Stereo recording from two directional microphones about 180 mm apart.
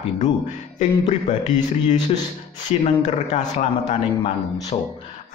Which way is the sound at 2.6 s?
40° left (ahead or behind).